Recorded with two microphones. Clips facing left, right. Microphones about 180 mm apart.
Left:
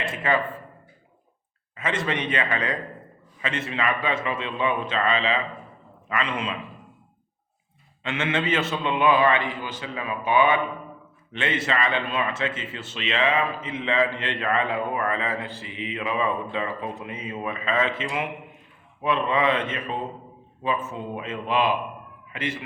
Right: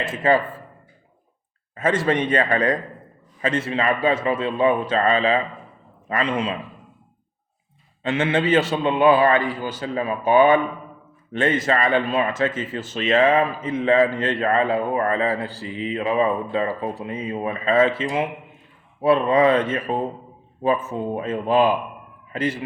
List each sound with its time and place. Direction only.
0.2 s speech: 35° right (ahead or behind)
1.7 s a man's voice: 45° right (ahead or behind)
8.0 s speech: 35° right (ahead or behind)